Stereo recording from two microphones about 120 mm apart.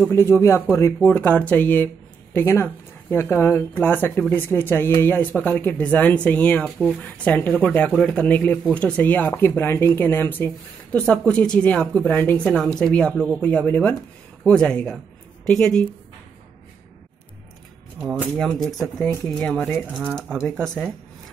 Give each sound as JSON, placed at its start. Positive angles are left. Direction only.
{"t": 0.1, "sound": "speech", "side_deg": 20}
{"t": 12.5, "sound": "speech", "side_deg": 5}
{"t": 18.4, "sound": "speech", "side_deg": 5}
{"t": 20.0, "sound": "speech", "side_deg": -15}
{"t": 20.6, "sound": "speech", "side_deg": 5}